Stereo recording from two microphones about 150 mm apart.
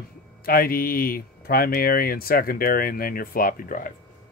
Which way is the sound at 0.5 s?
75° left (ahead or behind).